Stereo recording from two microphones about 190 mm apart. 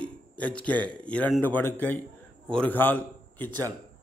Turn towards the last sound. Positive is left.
turn(degrees=-20)  # may be behind; listen again after turning